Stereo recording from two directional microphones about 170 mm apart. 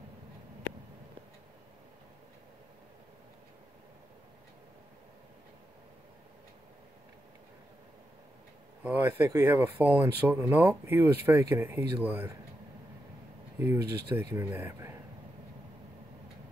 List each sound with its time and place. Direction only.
8.8 s speech: 10° right (ahead or behind)
13.6 s speech: 20° right (ahead or behind)